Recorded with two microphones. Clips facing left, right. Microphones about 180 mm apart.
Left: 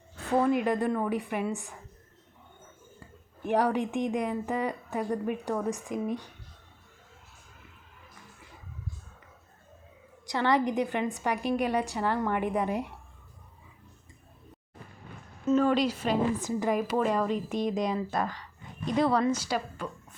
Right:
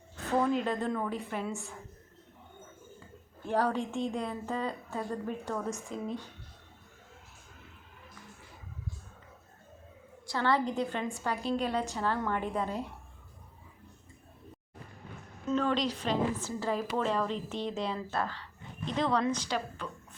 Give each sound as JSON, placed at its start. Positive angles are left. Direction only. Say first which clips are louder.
{"t": 0.3, "sound": "a woman's voice", "louder": "left 3 dB", "side_deg": 10}
{"t": 3.4, "sound": "a woman's voice", "louder": "left 4 dB", "side_deg": 15}
{"t": 10.2, "sound": "a woman's voice", "louder": "left 3 dB", "side_deg": 15}
{"t": 15.4, "sound": "a woman's voice", "louder": "left 5 dB", "side_deg": 10}